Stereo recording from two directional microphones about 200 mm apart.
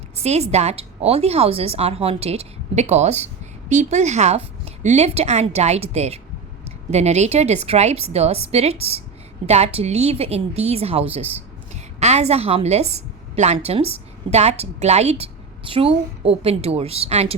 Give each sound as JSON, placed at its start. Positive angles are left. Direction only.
{"t": 0.2, "sound": "a woman's voice", "side_deg": -30}